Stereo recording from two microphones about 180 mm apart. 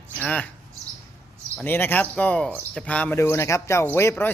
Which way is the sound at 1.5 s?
10° left (ahead or behind).